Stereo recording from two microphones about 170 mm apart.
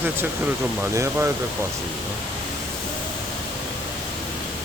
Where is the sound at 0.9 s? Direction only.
15° right (ahead or behind).